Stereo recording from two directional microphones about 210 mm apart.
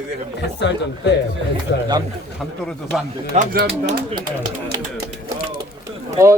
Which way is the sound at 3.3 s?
45° right (ahead or behind).